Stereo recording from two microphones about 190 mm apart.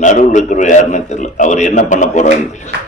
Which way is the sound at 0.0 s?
40° left (ahead or behind).